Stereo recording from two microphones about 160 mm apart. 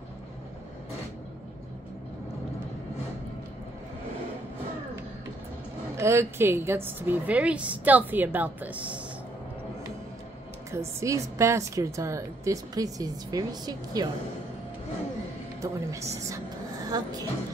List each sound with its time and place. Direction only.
5.9 s a woman's voice: 15° right (ahead or behind)
10.7 s a woman's voice: 15° right (ahead or behind)
15.6 s a woman's voice: 20° right (ahead or behind)